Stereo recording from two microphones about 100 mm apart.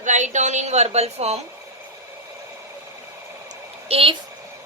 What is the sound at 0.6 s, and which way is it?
Speech, 90° right.